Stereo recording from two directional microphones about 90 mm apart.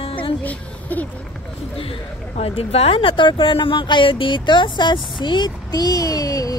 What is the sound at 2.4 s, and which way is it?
Speech, 90° left.